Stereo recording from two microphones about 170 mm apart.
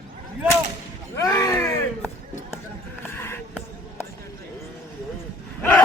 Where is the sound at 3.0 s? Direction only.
15° left (ahead or behind).